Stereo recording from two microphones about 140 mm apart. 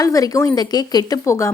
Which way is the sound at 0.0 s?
25° left (ahead or behind).